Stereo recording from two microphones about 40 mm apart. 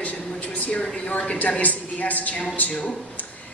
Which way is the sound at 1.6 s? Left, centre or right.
Left.